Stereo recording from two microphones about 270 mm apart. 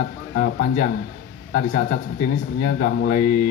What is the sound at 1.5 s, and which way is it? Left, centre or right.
Speech, left.